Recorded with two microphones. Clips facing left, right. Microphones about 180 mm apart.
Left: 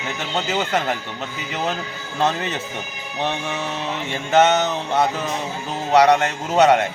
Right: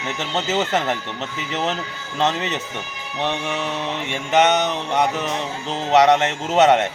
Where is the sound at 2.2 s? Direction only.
20° right (ahead or behind).